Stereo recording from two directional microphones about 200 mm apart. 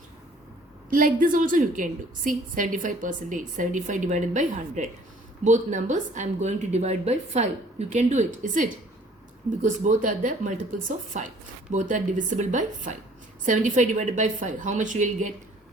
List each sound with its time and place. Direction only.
0.9 s a woman's voice: 45° right (ahead or behind)